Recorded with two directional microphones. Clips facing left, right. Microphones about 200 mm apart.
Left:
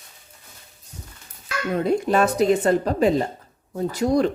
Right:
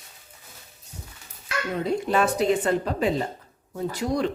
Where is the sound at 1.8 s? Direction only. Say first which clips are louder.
Left 3 dB; 45° left (ahead or behind).